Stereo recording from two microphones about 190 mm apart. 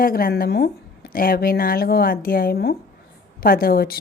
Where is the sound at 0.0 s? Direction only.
50° left (ahead or behind).